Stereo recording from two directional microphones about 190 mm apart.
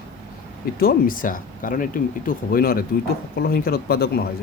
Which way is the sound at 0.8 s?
50° left (ahead or behind).